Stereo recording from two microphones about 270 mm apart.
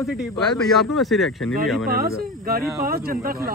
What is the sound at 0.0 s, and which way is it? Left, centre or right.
Speech, centre.